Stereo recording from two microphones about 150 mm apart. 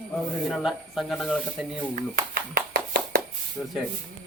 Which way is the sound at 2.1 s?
85° right.